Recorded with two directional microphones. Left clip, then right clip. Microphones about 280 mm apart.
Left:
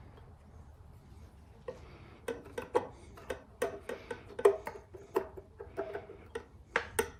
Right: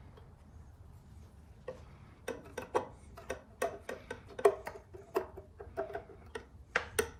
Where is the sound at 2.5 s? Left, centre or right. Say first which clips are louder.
Left 2 dB; centre.